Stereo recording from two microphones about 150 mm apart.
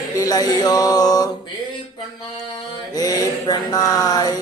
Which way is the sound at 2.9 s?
25° left (ahead or behind).